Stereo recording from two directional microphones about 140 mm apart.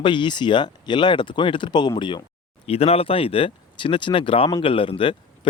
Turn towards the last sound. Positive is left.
turn(degrees=40)  # may be behind; listen again after turning